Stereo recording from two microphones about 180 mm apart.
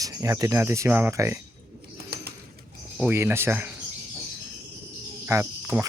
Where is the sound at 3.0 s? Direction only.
10° right (ahead or behind).